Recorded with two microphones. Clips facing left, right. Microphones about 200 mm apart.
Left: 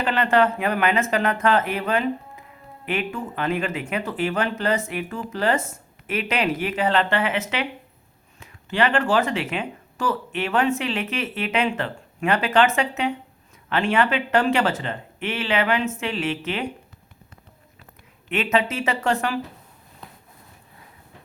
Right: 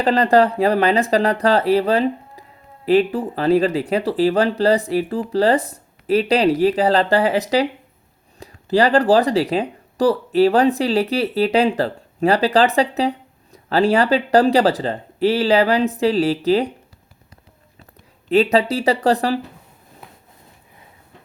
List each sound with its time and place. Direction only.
0.0 s speech: 35° right (ahead or behind)
18.3 s speech: 35° right (ahead or behind)